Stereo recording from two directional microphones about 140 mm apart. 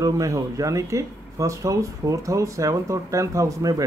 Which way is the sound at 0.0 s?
25° right (ahead or behind).